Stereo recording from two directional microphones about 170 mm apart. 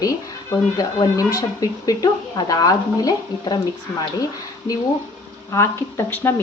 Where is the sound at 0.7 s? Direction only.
20° left (ahead or behind).